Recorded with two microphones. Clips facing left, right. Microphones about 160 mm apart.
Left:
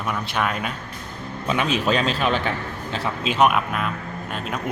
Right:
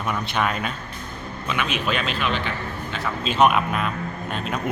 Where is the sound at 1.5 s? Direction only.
35° left (ahead or behind).